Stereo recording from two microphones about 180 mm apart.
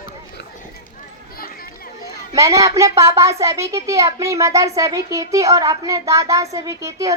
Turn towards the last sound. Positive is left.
turn(degrees=-15)  # may be behind; listen again after turning